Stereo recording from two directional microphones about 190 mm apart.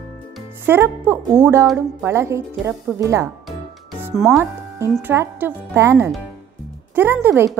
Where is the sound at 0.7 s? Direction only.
10° right (ahead or behind).